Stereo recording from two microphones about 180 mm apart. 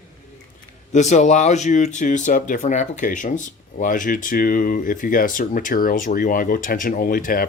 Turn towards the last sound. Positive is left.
turn(degrees=50)  # may be behind; listen again after turning